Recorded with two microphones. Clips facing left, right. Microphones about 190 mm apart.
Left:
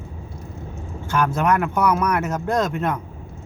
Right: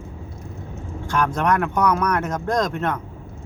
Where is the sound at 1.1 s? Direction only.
5° left (ahead or behind).